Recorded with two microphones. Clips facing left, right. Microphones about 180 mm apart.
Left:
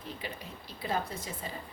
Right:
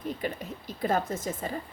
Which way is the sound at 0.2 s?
50° right (ahead or behind).